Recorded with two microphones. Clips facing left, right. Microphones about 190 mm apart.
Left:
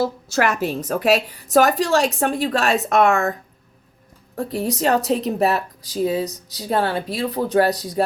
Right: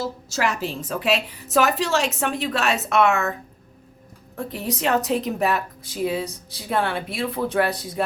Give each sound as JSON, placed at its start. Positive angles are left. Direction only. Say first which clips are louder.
{"t": 0.0, "sound": "a woman's voice", "louder": "left 5 dB", "side_deg": 60}
{"t": 0.9, "sound": "speech", "louder": "left 5 dB", "side_deg": 40}
{"t": 4.4, "sound": "speech", "louder": "left 5 dB", "side_deg": 40}
{"t": 6.2, "sound": "speech", "louder": "left 4 dB", "side_deg": -30}
{"t": 6.7, "sound": "speech", "louder": "left 3 dB", "side_deg": 35}